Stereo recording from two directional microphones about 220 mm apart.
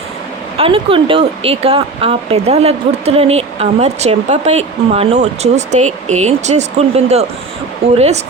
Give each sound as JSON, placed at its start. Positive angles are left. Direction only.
{"t": 0.6, "sound": "speech", "side_deg": -25}